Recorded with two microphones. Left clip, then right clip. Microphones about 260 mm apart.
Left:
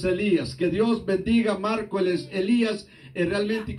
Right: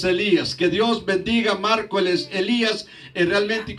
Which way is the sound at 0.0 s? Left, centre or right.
Right.